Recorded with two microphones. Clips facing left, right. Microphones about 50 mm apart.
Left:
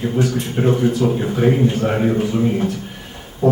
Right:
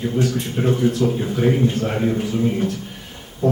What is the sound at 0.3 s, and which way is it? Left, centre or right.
A man's voice, centre.